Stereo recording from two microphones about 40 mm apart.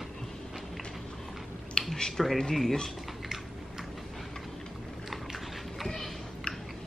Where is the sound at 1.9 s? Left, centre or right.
Centre.